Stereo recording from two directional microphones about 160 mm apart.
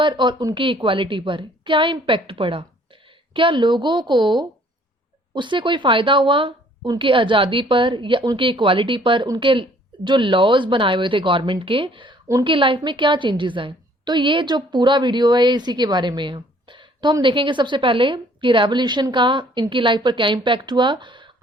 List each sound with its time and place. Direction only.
0.0 s a woman's voice: 30° right (ahead or behind)